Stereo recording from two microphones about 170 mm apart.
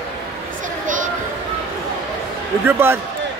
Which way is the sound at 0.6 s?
50° right (ahead or behind).